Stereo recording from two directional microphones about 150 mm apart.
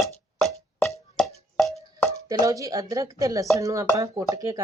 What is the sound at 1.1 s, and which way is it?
Music, centre (ahead or behind).